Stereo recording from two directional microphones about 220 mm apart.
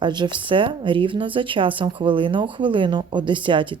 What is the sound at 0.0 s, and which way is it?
Speech, 20° right (ahead or behind).